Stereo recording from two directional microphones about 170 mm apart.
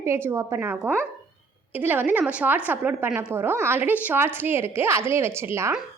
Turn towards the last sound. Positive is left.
turn(degrees=-15)  # may be behind; listen again after turning